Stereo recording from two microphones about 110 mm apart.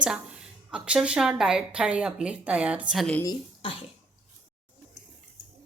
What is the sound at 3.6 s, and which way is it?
Cough, 55° left (ahead or behind).